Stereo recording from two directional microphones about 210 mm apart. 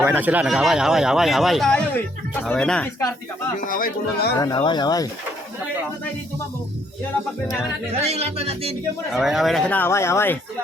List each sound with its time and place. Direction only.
0.0 s speech: 10° right (ahead or behind)
3.7 s speech: 40° left (ahead or behind)
4.4 s speech: 20° left (ahead or behind)
8.0 s speech: 30° right (ahead or behind)
9.1 s speech: centre (ahead or behind)